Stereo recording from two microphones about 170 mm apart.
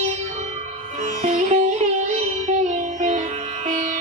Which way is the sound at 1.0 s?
45° right (ahead or behind).